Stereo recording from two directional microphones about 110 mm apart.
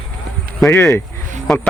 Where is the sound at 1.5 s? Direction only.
Centre (ahead or behind).